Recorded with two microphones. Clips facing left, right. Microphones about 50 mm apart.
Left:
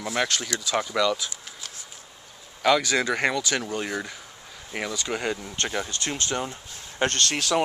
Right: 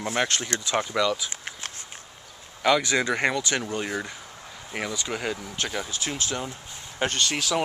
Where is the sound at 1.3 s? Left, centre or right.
Right.